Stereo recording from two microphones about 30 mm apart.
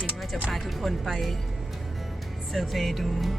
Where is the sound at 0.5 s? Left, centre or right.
Centre.